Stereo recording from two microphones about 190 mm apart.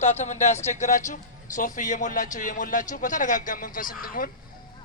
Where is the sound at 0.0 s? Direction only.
35° left (ahead or behind).